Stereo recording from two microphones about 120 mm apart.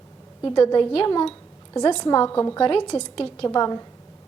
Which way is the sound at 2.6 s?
40° left (ahead or behind).